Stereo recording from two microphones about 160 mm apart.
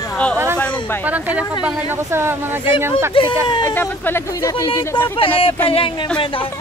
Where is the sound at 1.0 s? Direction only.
10° right (ahead or behind).